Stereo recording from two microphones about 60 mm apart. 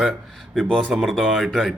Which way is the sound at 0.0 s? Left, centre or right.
Centre.